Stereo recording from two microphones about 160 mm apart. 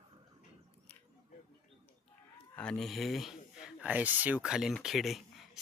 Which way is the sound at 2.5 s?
5° left (ahead or behind).